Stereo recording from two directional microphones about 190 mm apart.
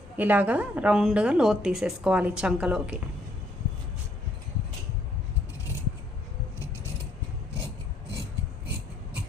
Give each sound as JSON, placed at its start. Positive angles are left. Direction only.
{"t": 0.2, "sound": "a woman's voice", "side_deg": -10}